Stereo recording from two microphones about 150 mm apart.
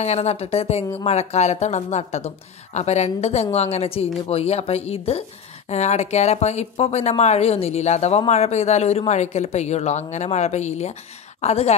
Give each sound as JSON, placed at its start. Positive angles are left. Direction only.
{"t": 0.0, "sound": "speech", "side_deg": 45}